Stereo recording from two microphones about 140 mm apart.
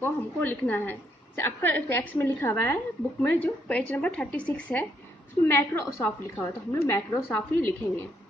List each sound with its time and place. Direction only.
0.0 s a woman's voice: 15° left (ahead or behind)